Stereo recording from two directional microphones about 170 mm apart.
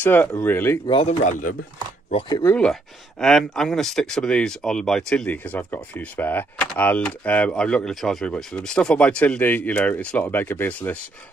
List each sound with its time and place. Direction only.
0.0 s speech: 10° left (ahead or behind)
1.0 s speech: 45° left (ahead or behind)
2.4 s speech: 5° left (ahead or behind)